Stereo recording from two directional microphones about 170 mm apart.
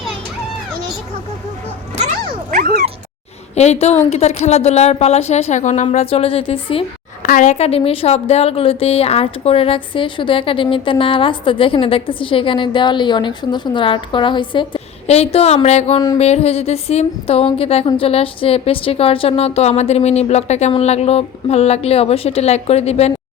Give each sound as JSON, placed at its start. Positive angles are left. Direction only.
{"t": 2.5, "sound": "dog", "side_deg": -60}
{"t": 3.5, "sound": "a woman's voice", "side_deg": 40}
{"t": 7.2, "sound": "a woman's voice", "side_deg": 50}